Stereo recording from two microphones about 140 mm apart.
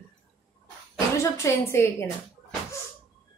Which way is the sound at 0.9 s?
20° left (ahead or behind).